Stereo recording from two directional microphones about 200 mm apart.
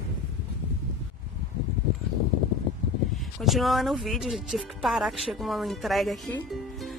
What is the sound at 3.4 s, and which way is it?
Speech, centre (ahead or behind).